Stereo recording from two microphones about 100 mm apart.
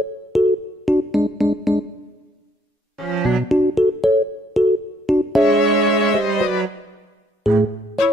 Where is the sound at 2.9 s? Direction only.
Centre (ahead or behind).